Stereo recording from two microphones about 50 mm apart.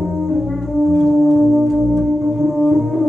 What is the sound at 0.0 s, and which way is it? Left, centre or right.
Music, centre.